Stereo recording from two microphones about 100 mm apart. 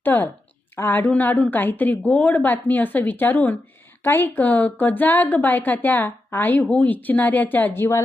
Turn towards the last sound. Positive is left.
turn(degrees=25)  # may be behind; listen again after turning